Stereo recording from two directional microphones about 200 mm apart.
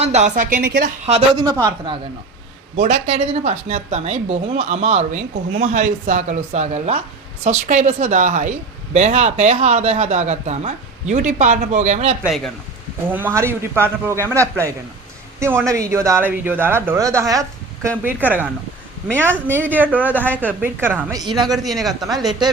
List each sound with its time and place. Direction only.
0.0 s a woman's voice: 35° right (ahead or behind)
0.6 s a woman's voice: 60° right (ahead or behind)
1.0 s speech: 25° right (ahead or behind)
2.8 s a woman's voice: 30° right (ahead or behind)
13.1 s speech: 10° right (ahead or behind)
21.6 s speech: centre (ahead or behind)
22.3 s speech: 20° right (ahead or behind)